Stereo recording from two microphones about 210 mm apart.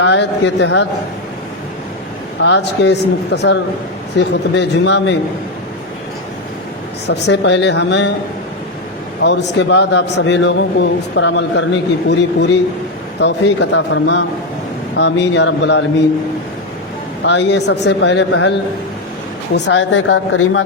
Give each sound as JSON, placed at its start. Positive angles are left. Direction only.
{"t": 0.0, "sound": "a man's voice", "side_deg": 55}
{"t": 2.4, "sound": "a man's voice", "side_deg": 55}
{"t": 7.1, "sound": "a man's voice", "side_deg": 55}
{"t": 9.2, "sound": "a man's voice", "side_deg": 55}
{"t": 17.2, "sound": "a man's voice", "side_deg": 55}
{"t": 19.5, "sound": "a man's voice", "side_deg": 60}